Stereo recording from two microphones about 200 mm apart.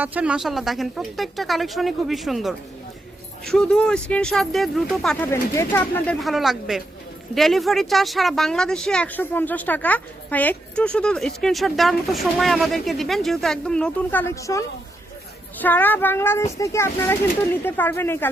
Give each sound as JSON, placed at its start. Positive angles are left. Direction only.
{"t": 0.0, "sound": "speech", "side_deg": -5}